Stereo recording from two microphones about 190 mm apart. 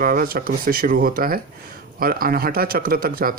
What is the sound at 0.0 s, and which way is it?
Speech, 50° right (ahead or behind).